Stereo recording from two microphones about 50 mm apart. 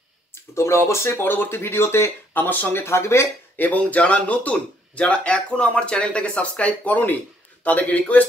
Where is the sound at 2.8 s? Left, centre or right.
Left.